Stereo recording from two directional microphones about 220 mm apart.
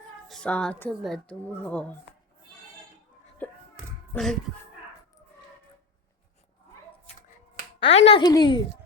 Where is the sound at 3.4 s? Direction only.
5° left (ahead or behind).